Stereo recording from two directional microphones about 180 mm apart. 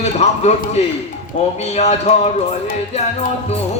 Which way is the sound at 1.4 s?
30° left (ahead or behind).